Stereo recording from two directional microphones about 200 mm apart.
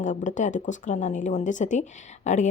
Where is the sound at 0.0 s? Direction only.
40° left (ahead or behind).